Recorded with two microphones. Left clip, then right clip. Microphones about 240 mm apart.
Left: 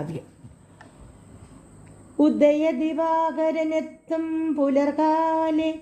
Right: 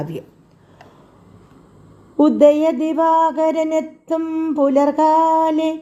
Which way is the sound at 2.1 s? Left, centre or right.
Right.